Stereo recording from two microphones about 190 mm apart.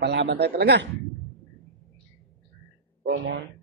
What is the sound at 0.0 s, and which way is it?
Speech, 65° right (ahead or behind).